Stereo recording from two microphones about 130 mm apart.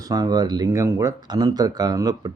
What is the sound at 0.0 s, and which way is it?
Speech, 30° right (ahead or behind).